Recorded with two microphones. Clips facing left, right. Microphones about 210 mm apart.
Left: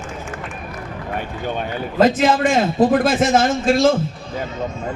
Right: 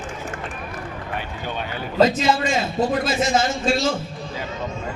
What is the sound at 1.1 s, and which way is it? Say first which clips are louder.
A man's voice: left 5 dB; 45° left (ahead or behind).